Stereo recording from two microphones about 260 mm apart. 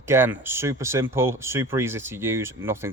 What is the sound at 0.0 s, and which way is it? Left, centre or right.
Speech, centre.